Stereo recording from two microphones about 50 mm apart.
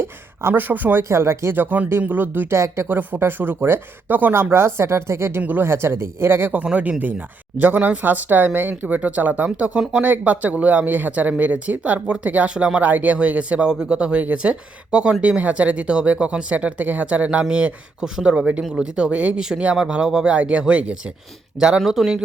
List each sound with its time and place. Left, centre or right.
0.0 s a sound: right
0.7 s speech: right
1.0 s speech: right
1.5 s speech: right
2.5 s speech: right
2.9 s speech: right
4.4 s speech: right
5.4 s speech: right
5.6 s speech: right
7.6 s speech: right
13.7 s speech: centre
18.0 s speech: centre
21.8 s speech: centre